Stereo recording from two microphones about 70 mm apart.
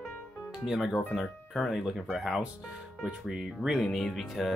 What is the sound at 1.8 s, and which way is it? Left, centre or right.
Speech, centre.